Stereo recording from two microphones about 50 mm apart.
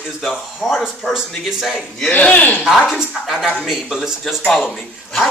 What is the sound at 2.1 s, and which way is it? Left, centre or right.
Speech, left.